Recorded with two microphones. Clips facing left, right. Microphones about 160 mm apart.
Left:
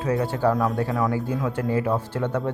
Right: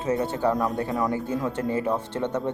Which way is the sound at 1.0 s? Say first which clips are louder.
Left 1 dB; 25° right (ahead or behind).